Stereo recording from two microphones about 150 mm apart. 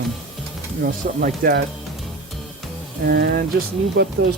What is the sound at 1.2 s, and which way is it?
Speech, 80° right.